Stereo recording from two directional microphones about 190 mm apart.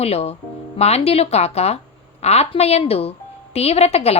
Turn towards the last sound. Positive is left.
turn(degrees=35)  # may be behind; listen again after turning